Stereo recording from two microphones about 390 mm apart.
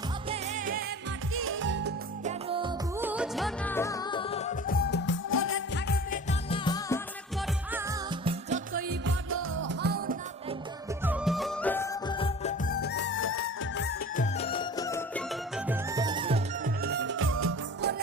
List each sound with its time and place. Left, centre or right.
0.3 s music: centre
1.3 s music: right
2.5 s music: centre
7.7 s music: centre; by 10.2 s right
11.0 s music: centre
16.8 s music: right